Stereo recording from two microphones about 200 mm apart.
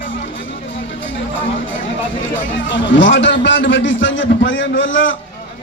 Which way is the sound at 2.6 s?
70° left (ahead or behind).